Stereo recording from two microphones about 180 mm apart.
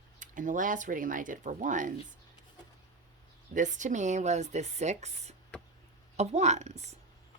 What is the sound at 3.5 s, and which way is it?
Speech, 45° right (ahead or behind).